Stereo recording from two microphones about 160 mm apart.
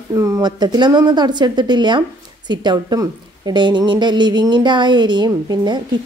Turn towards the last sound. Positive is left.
turn(degrees=-25)  # may be behind; listen again after turning